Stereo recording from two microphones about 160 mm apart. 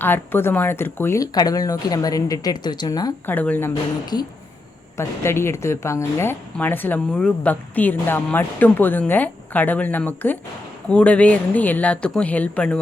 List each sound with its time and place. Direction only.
0.0 s speech: 10° left (ahead or behind)
3.2 s speech: 10° left (ahead or behind)
4.1 s speech: 25° left (ahead or behind); by 12.8 s 5° left (ahead or behind)